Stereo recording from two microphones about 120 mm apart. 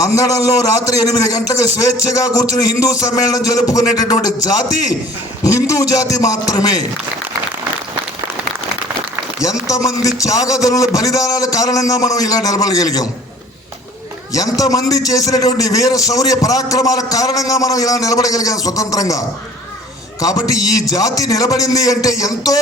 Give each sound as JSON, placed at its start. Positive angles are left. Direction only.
{"t": 0.2, "sound": "a man's voice", "side_deg": 30}
{"t": 5.4, "sound": "a man's voice", "side_deg": 25}
{"t": 9.4, "sound": "a man's voice", "side_deg": 30}
{"t": 14.3, "sound": "a man's voice", "side_deg": 30}
{"t": 20.2, "sound": "a man's voice", "side_deg": 30}